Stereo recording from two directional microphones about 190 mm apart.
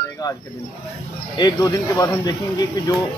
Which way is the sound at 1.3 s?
20° left (ahead or behind).